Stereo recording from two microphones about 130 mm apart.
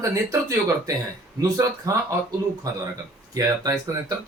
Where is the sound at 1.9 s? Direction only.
30° right (ahead or behind).